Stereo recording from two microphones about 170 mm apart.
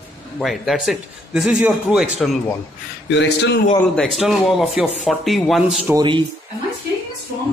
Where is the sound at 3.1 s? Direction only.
90° left.